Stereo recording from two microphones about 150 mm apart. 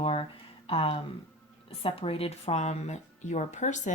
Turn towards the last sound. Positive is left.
turn(degrees=50)  # may be behind; listen again after turning